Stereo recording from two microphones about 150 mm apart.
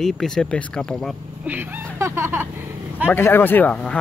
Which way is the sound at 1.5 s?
15° right (ahead or behind).